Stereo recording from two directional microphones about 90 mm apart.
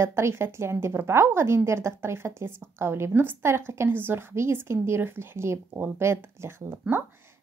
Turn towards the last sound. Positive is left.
turn(degrees=-25)  # may be behind; listen again after turning